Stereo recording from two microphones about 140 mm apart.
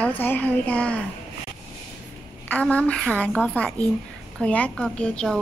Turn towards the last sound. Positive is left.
turn(degrees=5)  # may be behind; listen again after turning